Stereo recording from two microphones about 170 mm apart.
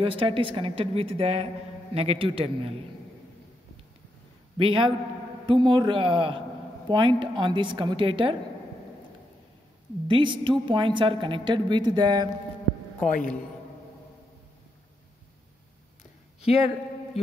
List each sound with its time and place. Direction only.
0.0 s speech: 30° right (ahead or behind)
4.6 s a woman's voice: 30° right (ahead or behind)
10.0 s a woman's voice: 30° right (ahead or behind)
13.1 s a man's voice: 50° left (ahead or behind)
16.3 s a sound: 35° left (ahead or behind)